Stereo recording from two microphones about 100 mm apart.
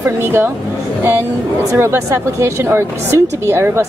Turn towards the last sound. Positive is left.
turn(degrees=-25)  # may be behind; listen again after turning